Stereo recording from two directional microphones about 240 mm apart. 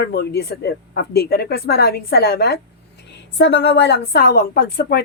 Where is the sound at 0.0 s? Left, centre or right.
Left.